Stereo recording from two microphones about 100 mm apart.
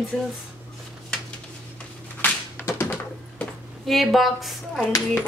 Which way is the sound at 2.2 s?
25° left (ahead or behind).